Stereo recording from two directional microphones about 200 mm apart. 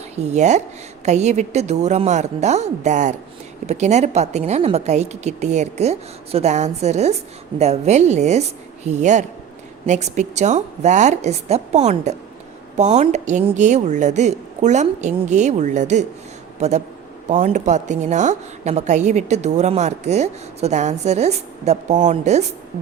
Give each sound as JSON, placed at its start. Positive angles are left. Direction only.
{"t": 0.2, "sound": "a woman's voice", "side_deg": -35}